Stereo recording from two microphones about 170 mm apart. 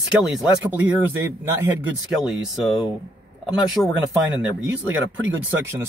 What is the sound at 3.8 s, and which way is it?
Speech, 10° left (ahead or behind).